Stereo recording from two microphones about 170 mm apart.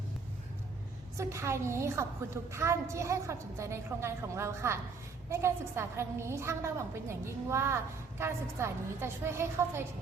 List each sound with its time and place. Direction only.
1.1 s a woman's voice: 15° right (ahead or behind)